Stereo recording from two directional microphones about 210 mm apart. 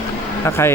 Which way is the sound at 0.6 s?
10° left (ahead or behind).